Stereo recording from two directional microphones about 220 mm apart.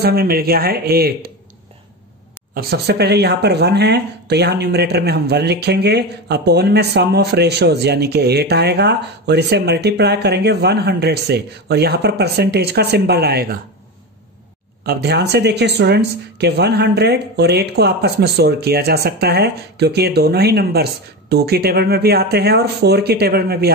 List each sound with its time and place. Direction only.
0.0 s speech: 45° right (ahead or behind)
2.5 s speech: 45° right (ahead or behind)
14.9 s speech: 50° right (ahead or behind)